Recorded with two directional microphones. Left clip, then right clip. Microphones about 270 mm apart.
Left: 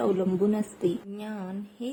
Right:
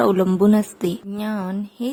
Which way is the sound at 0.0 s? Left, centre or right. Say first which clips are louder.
Right 8 dB; right.